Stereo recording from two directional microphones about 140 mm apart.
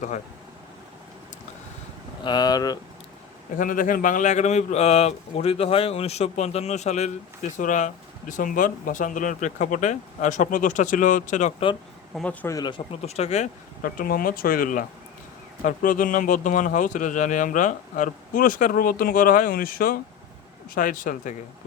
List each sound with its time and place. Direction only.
2.2 s speech: 30° left (ahead or behind)
3.6 s speech: 75° left (ahead or behind)
12.1 s speech: 10° left (ahead or behind)
12.5 s speech: 30° left (ahead or behind)
13.0 s speech: 50° left (ahead or behind)
13.8 s speech: 90° left
20.7 s speech: 80° left